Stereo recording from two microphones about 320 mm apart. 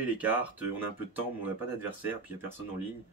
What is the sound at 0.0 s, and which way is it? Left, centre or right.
Speech, centre.